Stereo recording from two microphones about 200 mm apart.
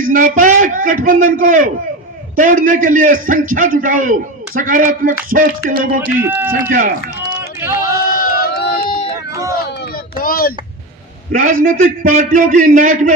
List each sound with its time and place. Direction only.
0.0 s a man's voice: 45° right (ahead or behind)
6.1 s speech: 10° right (ahead or behind)
6.5 s a man's voice: 45° right (ahead or behind)
7.7 s a sound: 45° left (ahead or behind)
9.9 s a sound: 45° left (ahead or behind)
11.3 s a man's voice: 45° right (ahead or behind)